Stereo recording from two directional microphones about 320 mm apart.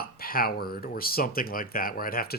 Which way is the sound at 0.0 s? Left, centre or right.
Left.